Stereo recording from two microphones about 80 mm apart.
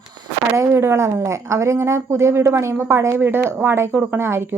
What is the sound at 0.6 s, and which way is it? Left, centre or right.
Speech, right.